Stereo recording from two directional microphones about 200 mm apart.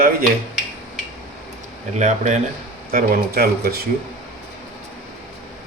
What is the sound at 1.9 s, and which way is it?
Speech, 35° right (ahead or behind).